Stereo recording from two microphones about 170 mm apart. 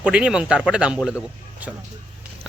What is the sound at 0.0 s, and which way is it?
Speech, 5° right (ahead or behind).